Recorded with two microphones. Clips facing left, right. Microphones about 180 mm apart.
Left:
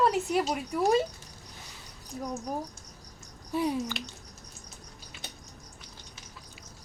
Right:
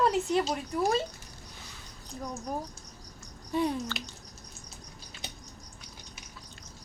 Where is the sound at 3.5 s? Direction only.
5° left (ahead or behind).